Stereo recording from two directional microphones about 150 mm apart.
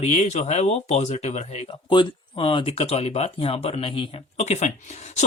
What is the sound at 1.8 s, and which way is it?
Speech, 30° left (ahead or behind).